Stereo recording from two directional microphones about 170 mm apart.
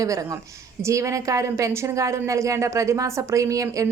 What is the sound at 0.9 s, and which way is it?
A woman's voice, 15° right (ahead or behind).